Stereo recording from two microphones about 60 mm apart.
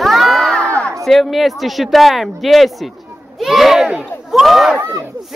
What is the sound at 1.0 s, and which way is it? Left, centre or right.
Speech, centre.